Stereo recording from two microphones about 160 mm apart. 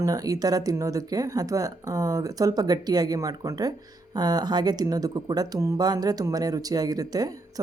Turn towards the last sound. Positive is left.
turn(degrees=-25)  # may be behind; listen again after turning